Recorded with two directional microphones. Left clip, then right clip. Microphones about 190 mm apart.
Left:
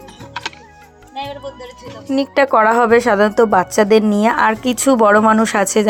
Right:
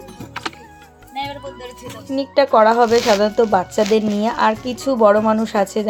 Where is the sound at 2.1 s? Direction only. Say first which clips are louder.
Left 1 dB; 20° left (ahead or behind).